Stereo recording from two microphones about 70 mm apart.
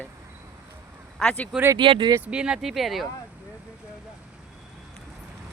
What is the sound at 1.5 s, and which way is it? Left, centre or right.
Speech, centre.